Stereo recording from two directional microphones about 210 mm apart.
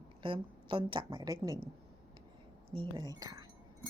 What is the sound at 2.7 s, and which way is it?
Speech, 25° right (ahead or behind).